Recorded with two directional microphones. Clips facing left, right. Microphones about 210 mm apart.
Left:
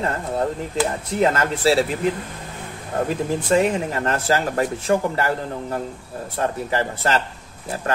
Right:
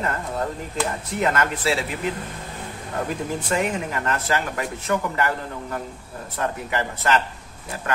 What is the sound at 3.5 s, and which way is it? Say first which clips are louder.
Speech: left 6 dB; 35° left (ahead or behind).